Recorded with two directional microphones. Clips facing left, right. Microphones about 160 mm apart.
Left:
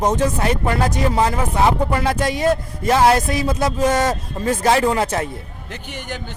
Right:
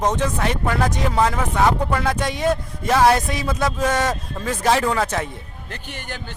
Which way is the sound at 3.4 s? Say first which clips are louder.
Left 3 dB; 35° left (ahead or behind).